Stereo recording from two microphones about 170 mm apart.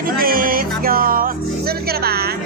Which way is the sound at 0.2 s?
55° right (ahead or behind).